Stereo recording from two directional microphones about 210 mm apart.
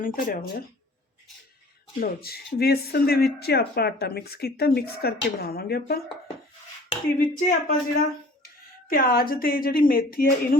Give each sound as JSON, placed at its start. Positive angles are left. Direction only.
{"t": 0.0, "sound": "speech", "side_deg": 40}
{"t": 2.0, "sound": "speech", "side_deg": 45}
{"t": 7.3, "sound": "speech", "side_deg": 40}